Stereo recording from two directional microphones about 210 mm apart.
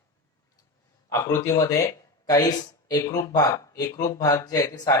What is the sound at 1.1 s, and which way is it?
Speech, 15° left (ahead or behind).